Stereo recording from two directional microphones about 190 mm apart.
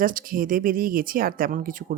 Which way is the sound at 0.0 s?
45° right (ahead or behind).